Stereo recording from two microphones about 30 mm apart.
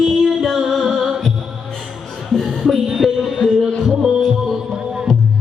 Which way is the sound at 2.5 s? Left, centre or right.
Centre.